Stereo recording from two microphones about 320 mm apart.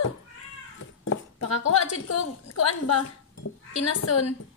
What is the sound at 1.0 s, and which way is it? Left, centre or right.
Speech, left.